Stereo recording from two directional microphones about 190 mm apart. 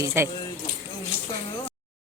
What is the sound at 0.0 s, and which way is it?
Speech, 15° right (ahead or behind).